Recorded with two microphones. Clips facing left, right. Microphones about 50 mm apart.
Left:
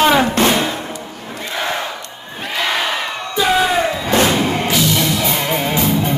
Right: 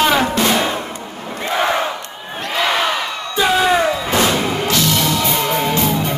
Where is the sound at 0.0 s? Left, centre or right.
Centre.